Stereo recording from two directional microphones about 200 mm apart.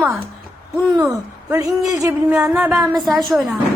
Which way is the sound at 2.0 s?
15° right (ahead or behind).